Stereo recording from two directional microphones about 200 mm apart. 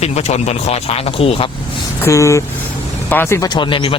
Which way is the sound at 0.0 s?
35° left (ahead or behind).